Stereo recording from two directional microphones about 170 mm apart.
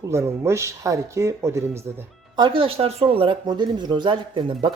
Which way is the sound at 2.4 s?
30° right (ahead or behind).